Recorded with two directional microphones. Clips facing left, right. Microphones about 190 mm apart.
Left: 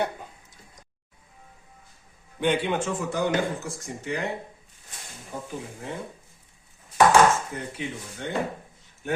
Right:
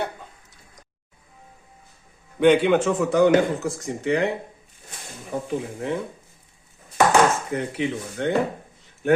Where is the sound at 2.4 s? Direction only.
75° right (ahead or behind).